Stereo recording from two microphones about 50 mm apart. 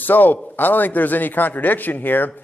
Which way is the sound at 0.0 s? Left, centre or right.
Left.